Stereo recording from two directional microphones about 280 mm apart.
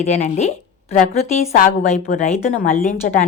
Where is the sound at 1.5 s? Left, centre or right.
Left.